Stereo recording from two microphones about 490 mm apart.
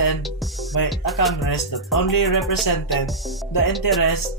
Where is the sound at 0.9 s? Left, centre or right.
Centre.